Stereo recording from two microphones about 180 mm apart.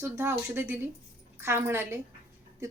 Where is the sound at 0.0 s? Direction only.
15° right (ahead or behind).